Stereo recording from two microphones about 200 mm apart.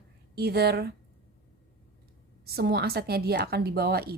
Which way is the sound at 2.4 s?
50° right (ahead or behind).